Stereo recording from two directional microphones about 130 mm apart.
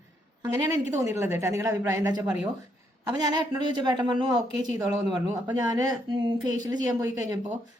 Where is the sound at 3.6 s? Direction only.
35° right (ahead or behind).